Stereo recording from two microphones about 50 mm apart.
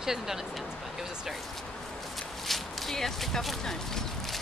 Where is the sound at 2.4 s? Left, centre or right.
Centre.